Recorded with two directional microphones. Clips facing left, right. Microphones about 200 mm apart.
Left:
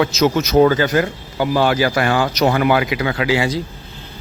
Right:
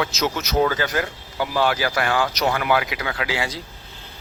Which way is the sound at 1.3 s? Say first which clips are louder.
Left 7 dB; 35° left (ahead or behind).